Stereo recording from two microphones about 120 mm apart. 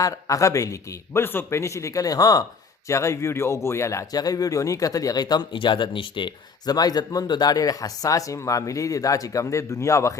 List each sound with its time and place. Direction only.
0.0 s speech: 30° left (ahead or behind)